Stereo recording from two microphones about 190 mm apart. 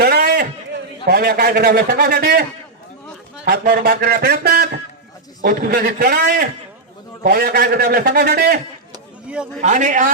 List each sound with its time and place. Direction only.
0.0 s a sound: 55° right (ahead or behind)
1.0 s a man's voice: 55° right (ahead or behind)
3.4 s a man's voice: 55° right (ahead or behind)
9.2 s speech: 5° right (ahead or behind)
9.6 s a man's voice: 40° right (ahead or behind)